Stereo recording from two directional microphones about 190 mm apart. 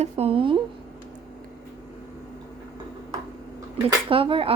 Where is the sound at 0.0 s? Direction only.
30° right (ahead or behind).